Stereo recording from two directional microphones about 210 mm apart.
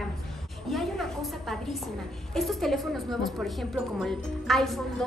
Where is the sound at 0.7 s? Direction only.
Centre (ahead or behind).